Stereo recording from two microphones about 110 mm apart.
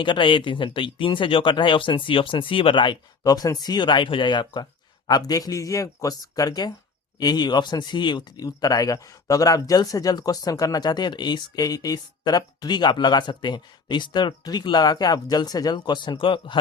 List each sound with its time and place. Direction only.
0.0 s speech: 45° left (ahead or behind)